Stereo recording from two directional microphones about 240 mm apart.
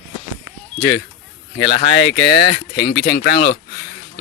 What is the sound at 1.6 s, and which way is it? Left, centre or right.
Speech, left.